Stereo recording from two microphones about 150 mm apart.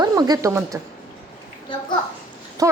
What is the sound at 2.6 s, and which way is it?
Speech, 20° right (ahead or behind).